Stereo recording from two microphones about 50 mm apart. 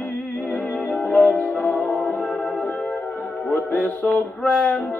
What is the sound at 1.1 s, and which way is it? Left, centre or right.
Music, left.